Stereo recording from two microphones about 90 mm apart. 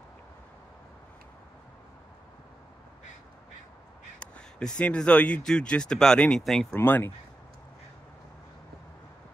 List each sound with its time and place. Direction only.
4.2 s speech: 10° left (ahead or behind)
6.7 s speech: 25° left (ahead or behind)